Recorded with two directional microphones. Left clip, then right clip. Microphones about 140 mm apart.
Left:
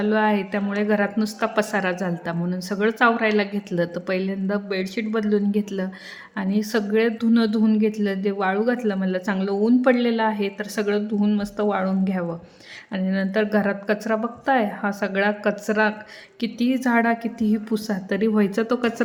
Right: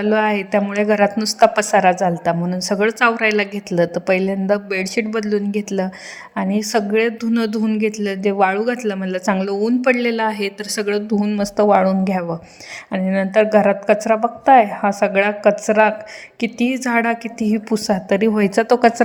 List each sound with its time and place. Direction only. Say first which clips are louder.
0.0 s a woman's voice: right 4 dB; 35° right (ahead or behind)
12.9 s a woman's voice: right 7 dB; 30° right (ahead or behind); by 19.0 s 45° right (ahead or behind)